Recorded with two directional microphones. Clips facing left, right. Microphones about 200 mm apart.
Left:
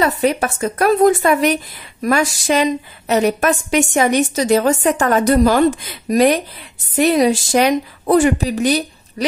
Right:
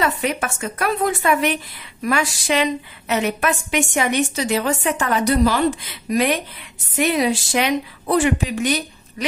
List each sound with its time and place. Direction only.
0.0 s a woman's voice: 35° left (ahead or behind)